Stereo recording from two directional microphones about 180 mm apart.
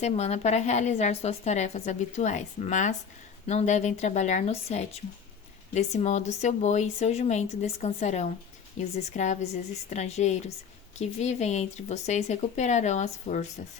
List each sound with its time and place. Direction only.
0.0 s a woman's voice: 35° left (ahead or behind)